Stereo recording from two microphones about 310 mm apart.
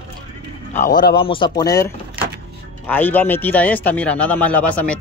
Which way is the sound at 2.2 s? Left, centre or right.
Centre.